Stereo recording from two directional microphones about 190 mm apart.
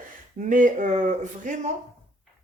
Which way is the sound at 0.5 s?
45° right (ahead or behind).